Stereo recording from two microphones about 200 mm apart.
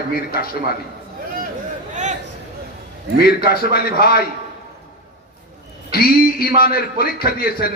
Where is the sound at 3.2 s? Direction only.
50° left (ahead or behind).